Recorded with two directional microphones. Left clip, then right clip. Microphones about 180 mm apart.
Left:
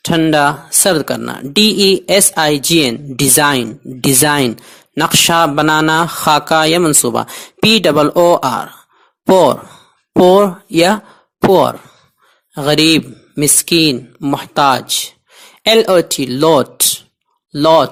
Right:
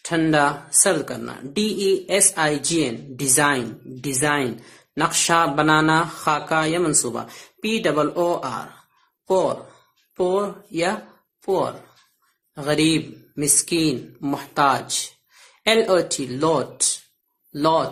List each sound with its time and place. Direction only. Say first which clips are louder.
0.0 s speech: left 7 dB; 45° left (ahead or behind)
10.2 s speech: left 13 dB; 50° left (ahead or behind)
12.5 s speech: left 9 dB; 50° left (ahead or behind)